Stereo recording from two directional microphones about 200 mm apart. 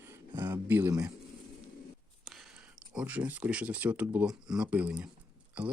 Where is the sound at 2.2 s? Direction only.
Centre (ahead or behind).